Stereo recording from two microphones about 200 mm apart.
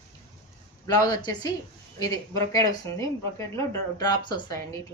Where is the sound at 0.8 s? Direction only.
20° left (ahead or behind).